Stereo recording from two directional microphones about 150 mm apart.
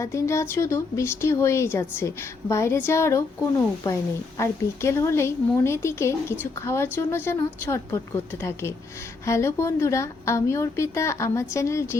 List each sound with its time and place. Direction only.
0.0 s speech: 20° left (ahead or behind)
4.4 s a woman's voice: 20° left (ahead or behind)